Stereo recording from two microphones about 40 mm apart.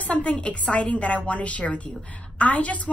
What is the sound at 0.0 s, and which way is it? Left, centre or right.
Speech, left.